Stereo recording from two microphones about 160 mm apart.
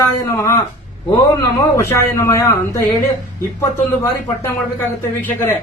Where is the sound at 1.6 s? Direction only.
20° left (ahead or behind).